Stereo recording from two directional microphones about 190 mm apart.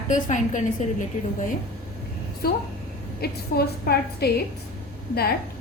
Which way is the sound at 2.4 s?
55° left (ahead or behind).